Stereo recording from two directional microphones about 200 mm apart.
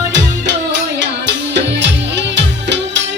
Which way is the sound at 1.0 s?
60° right (ahead or behind).